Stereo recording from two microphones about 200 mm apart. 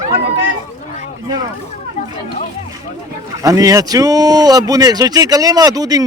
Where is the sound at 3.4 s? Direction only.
15° right (ahead or behind).